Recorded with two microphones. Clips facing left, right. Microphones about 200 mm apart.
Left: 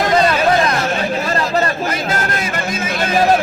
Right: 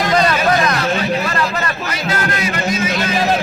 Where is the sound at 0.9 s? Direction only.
45° left (ahead or behind).